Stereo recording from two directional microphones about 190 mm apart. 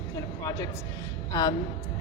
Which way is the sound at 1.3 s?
20° left (ahead or behind).